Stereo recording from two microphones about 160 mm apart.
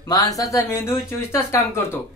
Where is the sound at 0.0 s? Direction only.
25° left (ahead or behind).